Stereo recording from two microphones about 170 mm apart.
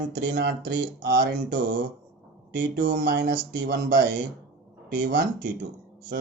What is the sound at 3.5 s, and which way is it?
Speech, 75° right (ahead or behind).